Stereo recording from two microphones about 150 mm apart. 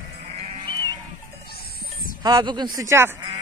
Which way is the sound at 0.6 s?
25° right (ahead or behind).